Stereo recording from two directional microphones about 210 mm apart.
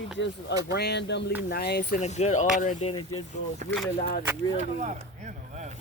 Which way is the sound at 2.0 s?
30° left (ahead or behind).